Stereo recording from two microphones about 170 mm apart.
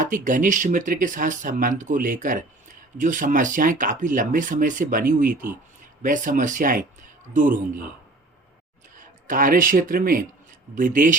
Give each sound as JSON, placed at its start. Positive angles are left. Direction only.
{"t": 0.0, "sound": "speech", "side_deg": -50}
{"t": 9.2, "sound": "speech", "side_deg": -55}